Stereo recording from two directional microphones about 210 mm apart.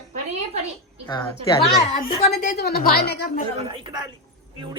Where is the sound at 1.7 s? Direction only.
25° left (ahead or behind).